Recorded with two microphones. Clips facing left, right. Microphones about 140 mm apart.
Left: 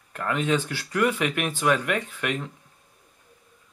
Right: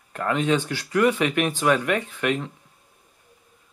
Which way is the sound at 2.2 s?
30° right (ahead or behind).